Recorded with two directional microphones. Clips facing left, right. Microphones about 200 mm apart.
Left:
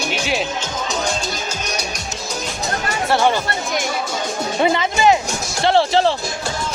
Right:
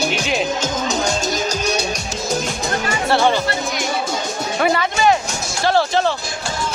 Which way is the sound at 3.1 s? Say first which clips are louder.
Even; 15° left (ahead or behind).